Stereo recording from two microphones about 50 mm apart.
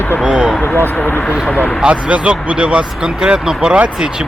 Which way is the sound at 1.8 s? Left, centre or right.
Right.